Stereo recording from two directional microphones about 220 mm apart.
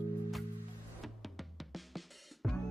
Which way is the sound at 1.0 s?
Centre (ahead or behind).